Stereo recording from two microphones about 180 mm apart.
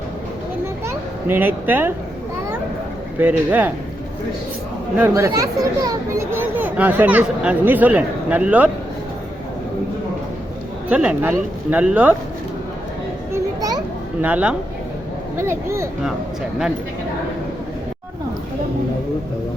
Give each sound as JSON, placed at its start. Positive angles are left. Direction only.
{"t": 0.9, "sound": "a child's voice", "side_deg": -10}
{"t": 3.2, "sound": "a child's voice", "side_deg": -10}
{"t": 4.9, "sound": "a child's voice", "side_deg": -15}
{"t": 10.8, "sound": "a child's voice", "side_deg": -5}
{"t": 13.3, "sound": "children playing", "side_deg": -20}
{"t": 14.2, "sound": "a child's voice", "side_deg": -10}